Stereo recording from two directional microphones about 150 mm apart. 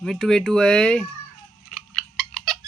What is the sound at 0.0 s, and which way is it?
Speech, centre (ahead or behind).